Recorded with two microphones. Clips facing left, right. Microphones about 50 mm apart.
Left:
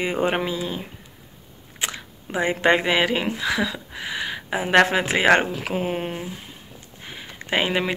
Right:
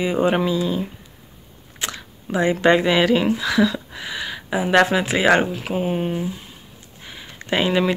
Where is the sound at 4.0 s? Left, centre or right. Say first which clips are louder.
Even; left.